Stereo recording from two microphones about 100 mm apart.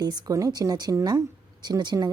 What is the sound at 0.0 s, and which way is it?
A woman's voice, 35° right (ahead or behind).